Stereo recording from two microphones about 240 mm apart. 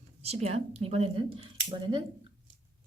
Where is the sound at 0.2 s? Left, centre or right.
Right.